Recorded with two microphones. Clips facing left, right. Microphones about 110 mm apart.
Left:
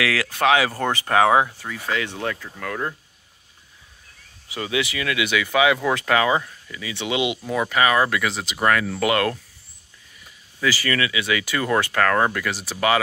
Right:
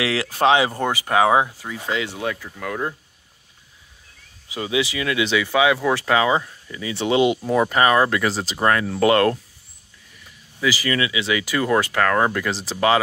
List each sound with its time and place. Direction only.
0.0 s speech: 25° right (ahead or behind)
4.5 s speech: 20° right (ahead or behind)
6.8 s speech: 35° right (ahead or behind)
10.6 s speech: 15° right (ahead or behind)